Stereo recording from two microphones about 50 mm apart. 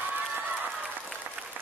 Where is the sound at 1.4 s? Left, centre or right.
Centre.